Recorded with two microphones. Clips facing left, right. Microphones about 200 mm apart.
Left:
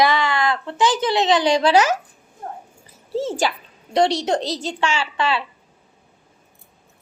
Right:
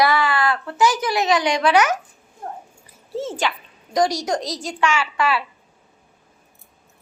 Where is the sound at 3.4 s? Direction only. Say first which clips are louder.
Left 2 dB; 35° left (ahead or behind).